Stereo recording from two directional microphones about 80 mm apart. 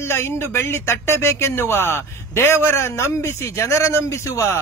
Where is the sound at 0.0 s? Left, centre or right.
Left.